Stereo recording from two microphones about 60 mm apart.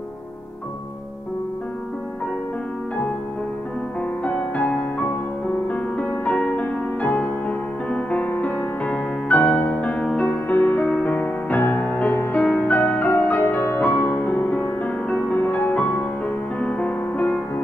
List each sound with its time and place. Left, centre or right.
4.2 s music: left